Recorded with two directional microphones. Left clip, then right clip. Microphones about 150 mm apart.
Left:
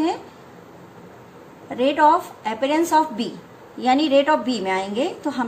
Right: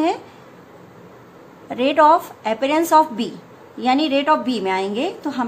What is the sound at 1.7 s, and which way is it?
A woman's voice, 30° right (ahead or behind).